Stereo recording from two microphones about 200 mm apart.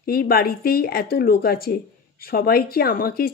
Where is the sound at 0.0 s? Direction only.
50° left (ahead or behind).